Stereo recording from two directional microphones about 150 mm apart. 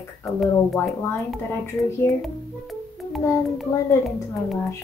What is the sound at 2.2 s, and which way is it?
A child's voice, centre (ahead or behind).